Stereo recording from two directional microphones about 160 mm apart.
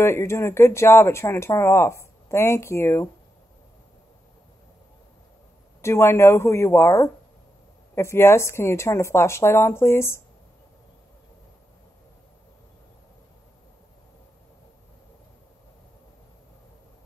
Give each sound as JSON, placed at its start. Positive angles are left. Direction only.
{"t": 0.0, "sound": "speech", "side_deg": 15}
{"t": 5.8, "sound": "speech", "side_deg": 15}